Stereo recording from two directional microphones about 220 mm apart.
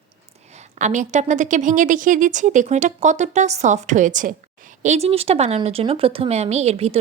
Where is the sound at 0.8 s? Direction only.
35° right (ahead or behind).